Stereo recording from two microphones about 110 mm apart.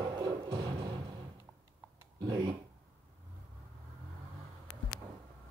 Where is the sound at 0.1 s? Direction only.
40° right (ahead or behind).